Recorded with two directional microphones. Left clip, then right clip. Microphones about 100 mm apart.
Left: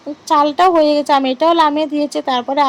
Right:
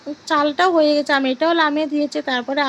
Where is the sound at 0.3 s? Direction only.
20° left (ahead or behind).